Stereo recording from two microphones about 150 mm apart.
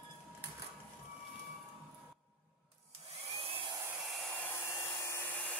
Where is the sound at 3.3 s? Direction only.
40° right (ahead or behind).